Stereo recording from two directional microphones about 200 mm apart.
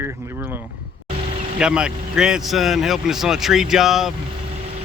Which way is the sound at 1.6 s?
5° right (ahead or behind).